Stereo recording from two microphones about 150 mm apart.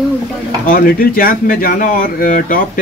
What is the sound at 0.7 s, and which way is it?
Speech, 85° left.